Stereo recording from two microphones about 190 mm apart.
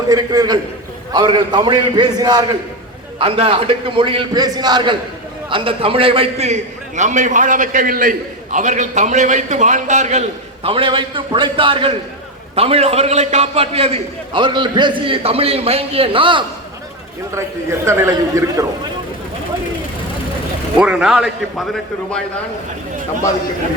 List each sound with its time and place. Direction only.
0.1 s a man's voice: 20° right (ahead or behind)
17.3 s a man's voice: 15° right (ahead or behind)
20.7 s speech: 5° right (ahead or behind)